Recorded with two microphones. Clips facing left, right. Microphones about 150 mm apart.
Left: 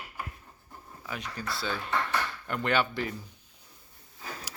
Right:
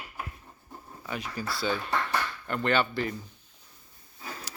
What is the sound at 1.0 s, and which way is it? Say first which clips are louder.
Speech: right 2 dB; centre (ahead or behind).